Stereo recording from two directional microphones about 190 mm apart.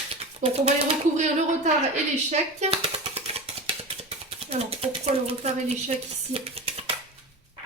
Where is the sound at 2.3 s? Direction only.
35° right (ahead or behind).